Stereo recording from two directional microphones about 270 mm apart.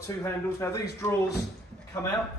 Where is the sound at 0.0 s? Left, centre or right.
Centre.